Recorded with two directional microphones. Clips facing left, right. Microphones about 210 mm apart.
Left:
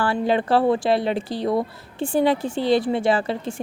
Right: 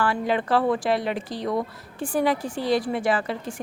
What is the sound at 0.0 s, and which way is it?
A woman's voice, 30° left (ahead or behind).